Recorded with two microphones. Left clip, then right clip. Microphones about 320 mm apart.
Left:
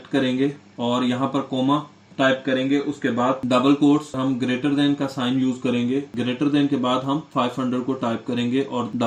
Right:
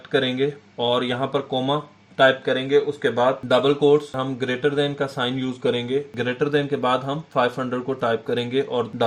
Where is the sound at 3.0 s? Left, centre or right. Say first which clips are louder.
Right 2 dB; right.